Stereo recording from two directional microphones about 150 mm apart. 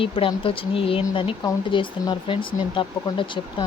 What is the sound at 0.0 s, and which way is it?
Speech, 35° left (ahead or behind).